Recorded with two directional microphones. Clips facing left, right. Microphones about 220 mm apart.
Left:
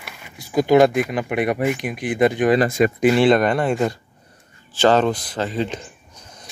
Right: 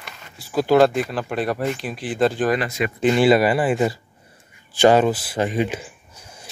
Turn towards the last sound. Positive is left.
turn(degrees=-10)  # may be behind; listen again after turning